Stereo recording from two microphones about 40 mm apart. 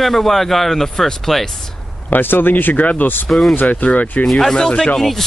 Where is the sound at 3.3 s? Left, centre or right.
Centre.